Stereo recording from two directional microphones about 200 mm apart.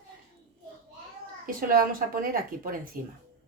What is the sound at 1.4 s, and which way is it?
A woman's voice, 45° right (ahead or behind).